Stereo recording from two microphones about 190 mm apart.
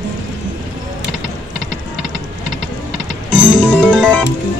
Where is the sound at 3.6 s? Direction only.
5° left (ahead or behind).